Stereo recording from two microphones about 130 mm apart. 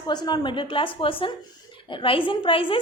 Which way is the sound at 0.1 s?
35° left (ahead or behind).